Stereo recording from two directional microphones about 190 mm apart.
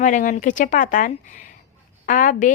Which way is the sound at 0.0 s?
45° left (ahead or behind).